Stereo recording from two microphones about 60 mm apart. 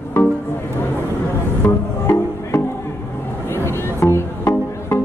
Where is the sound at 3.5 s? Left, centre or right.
Left.